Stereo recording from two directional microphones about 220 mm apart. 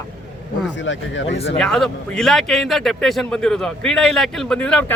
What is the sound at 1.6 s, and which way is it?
A man's voice, centre (ahead or behind).